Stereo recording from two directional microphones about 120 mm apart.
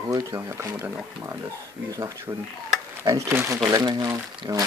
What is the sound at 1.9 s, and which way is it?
Speech, 30° right (ahead or behind).